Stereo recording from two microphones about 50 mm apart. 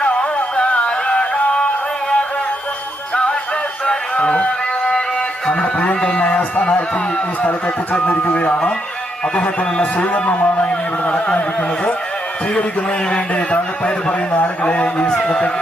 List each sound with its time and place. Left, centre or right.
0.0 s music: centre
3.8 s a sound: left
5.5 s music: left
8.0 s music: left
13.1 s music: left